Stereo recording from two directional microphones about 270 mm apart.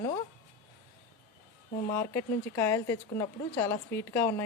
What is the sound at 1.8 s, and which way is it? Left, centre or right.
A woman's voice, centre.